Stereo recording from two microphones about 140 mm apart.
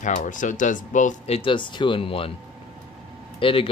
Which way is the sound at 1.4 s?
35° left (ahead or behind).